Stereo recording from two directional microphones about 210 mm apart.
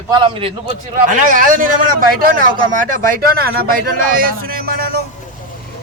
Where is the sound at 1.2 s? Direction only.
40° right (ahead or behind).